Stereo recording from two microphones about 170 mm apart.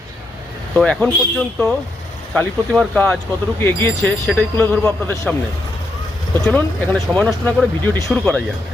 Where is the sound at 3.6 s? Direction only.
15° left (ahead or behind).